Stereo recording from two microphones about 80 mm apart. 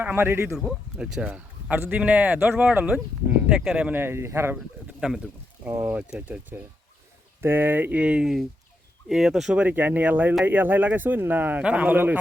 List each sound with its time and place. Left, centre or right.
0.0 s speech: right
0.5 s speech: centre
1.7 s speech: right
3.9 s speech: right
4.5 s bird: centre
5.6 s speech: centre
9.0 s speech: centre
9.6 s speech: right